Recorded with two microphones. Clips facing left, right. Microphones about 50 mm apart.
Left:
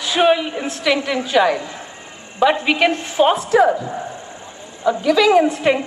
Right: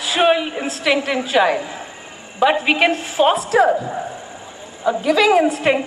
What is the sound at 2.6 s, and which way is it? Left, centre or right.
Speech, right.